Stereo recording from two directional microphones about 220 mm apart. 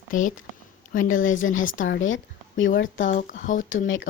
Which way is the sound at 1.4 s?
60° left (ahead or behind).